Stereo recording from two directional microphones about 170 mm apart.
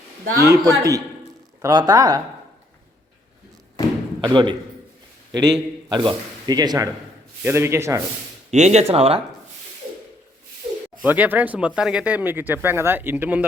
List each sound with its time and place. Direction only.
0.4 s a man's voice: 15° right (ahead or behind)
4.2 s a man's voice: 30° right (ahead or behind)
8.4 s speech: 40° right (ahead or behind)
11.0 s speech: 10° right (ahead or behind)